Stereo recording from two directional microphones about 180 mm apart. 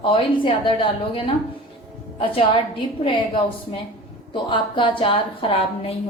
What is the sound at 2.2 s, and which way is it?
A woman's voice, 25° left (ahead or behind).